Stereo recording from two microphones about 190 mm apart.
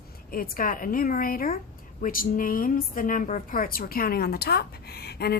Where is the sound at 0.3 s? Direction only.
50° left (ahead or behind).